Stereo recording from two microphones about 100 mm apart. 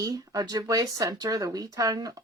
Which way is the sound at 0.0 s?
35° right (ahead or behind).